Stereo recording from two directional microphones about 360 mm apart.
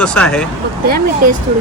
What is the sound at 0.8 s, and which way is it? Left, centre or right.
Speech, right.